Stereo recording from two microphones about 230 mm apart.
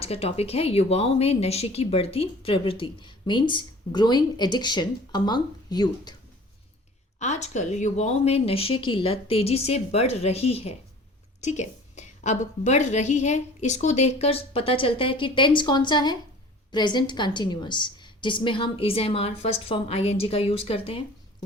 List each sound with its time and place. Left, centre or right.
0.0 s speech: left
7.2 s speech: left